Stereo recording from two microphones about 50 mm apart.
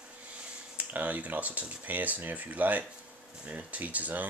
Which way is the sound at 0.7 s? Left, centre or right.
Right.